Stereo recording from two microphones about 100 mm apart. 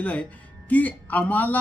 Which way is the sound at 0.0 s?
15° left (ahead or behind).